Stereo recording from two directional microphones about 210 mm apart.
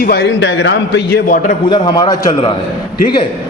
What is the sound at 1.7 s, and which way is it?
Speech, 20° left (ahead or behind).